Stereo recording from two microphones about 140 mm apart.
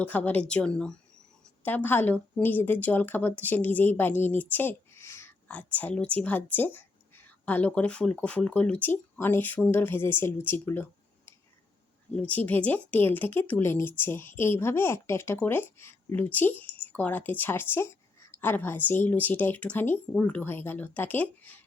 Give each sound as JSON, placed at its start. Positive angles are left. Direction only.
{"t": 0.0, "sound": "speech", "side_deg": 10}
{"t": 12.1, "sound": "speech", "side_deg": 10}